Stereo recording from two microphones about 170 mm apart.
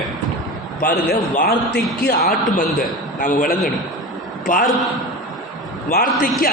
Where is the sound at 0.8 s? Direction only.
55° left (ahead or behind).